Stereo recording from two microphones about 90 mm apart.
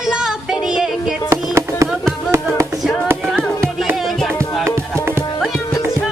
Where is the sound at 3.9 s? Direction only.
Centre (ahead or behind).